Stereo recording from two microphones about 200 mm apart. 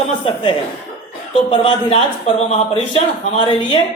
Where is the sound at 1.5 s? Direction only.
30° left (ahead or behind).